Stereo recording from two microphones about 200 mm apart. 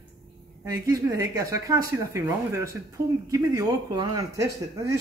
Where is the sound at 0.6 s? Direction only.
15° right (ahead or behind).